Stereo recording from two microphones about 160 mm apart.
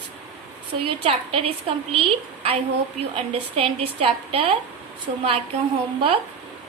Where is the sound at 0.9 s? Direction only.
35° right (ahead or behind).